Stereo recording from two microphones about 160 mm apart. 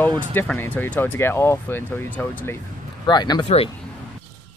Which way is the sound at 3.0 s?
25° left (ahead or behind).